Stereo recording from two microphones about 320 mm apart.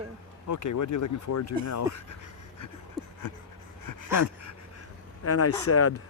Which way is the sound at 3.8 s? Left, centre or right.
Left.